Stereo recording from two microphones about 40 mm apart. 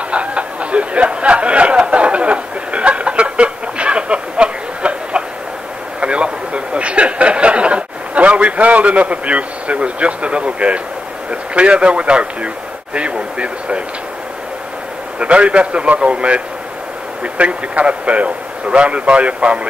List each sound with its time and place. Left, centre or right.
0.1 s a sound: right
11.2 s a man's voice: right
15.1 s a man's voice: right